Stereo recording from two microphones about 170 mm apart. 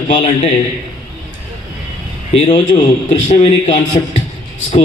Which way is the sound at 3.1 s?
35° left (ahead or behind).